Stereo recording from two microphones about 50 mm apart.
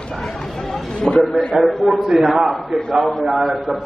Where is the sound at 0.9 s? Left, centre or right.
Centre.